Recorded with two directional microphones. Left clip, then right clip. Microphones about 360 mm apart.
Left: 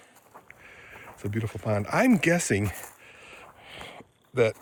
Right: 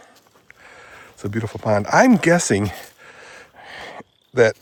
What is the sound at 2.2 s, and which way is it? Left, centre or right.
Speech, centre.